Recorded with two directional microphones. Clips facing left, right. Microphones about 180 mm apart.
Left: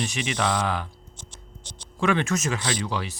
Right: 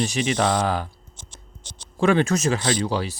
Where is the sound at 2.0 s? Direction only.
35° right (ahead or behind).